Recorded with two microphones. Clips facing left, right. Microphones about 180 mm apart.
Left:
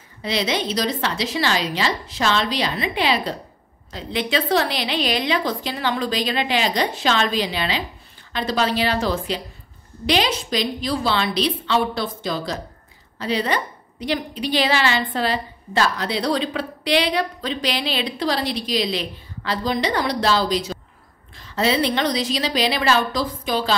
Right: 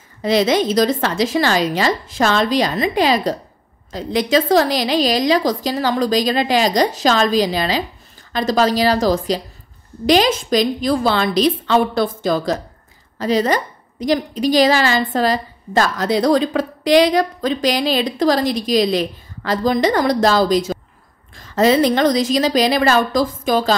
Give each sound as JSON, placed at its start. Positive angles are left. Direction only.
{"t": 0.2, "sound": "a woman's voice", "side_deg": -45}